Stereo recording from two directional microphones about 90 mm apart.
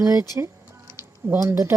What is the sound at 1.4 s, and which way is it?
Speech, 35° right (ahead or behind).